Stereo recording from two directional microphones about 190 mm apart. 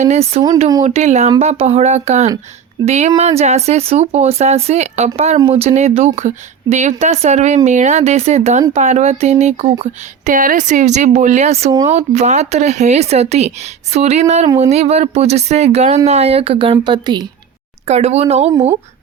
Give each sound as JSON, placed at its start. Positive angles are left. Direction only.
{"t": 0.0, "sound": "speech", "side_deg": -35}
{"t": 10.2, "sound": "speech", "side_deg": -45}
{"t": 17.8, "sound": "speech", "side_deg": -35}